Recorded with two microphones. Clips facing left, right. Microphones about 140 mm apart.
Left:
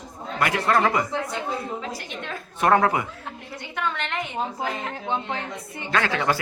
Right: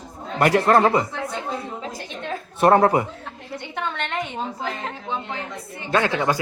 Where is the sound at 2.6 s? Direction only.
30° right (ahead or behind).